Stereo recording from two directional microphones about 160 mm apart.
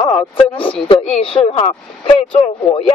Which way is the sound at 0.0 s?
35° left (ahead or behind).